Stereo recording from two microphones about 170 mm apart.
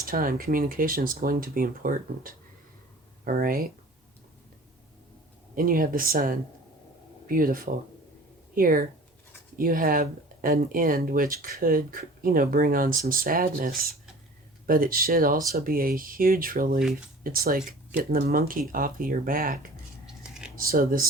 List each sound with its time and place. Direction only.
0.0 s speech: 55° right (ahead or behind)
5.5 s speech: 55° right (ahead or behind)
20.6 s speech: 60° right (ahead or behind)